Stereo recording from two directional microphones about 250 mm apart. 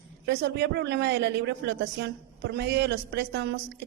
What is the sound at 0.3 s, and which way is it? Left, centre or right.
A woman's voice, right.